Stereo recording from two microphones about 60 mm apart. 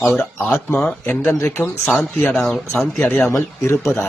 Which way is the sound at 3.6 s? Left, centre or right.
Left.